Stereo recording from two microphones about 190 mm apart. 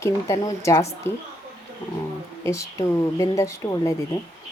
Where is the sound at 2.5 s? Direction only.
15° left (ahead or behind).